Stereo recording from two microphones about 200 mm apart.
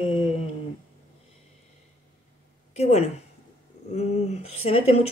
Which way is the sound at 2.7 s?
30° left (ahead or behind).